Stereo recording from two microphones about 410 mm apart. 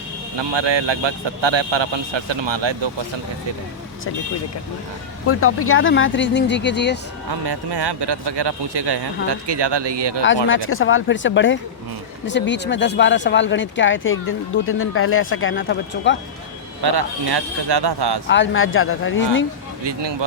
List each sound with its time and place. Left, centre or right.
0.3 s a man's voice: right
5.2 s speech: left
7.3 s speech: right
10.5 s speech: left
16.8 s speech: right
18.3 s speech: left
19.8 s speech: right